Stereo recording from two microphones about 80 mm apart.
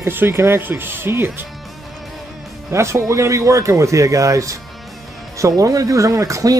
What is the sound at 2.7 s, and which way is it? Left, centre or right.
Speech, right.